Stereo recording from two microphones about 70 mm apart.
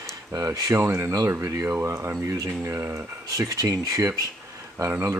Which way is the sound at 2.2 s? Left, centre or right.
Right.